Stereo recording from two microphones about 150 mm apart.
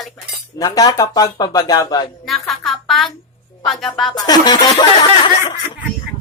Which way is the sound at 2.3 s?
Centre (ahead or behind).